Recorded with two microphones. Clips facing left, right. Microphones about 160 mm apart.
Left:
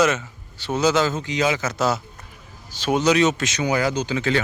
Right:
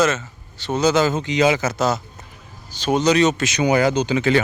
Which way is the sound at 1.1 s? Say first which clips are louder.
Right 4 dB; 20° right (ahead or behind).